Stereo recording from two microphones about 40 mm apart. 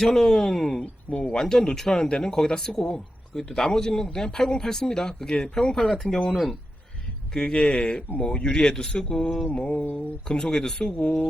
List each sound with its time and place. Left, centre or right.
0.0 s speech: centre
6.3 s speech: centre
7.3 s speech: left
8.4 s speech: centre
9.6 s a sound: left
9.9 s speech: left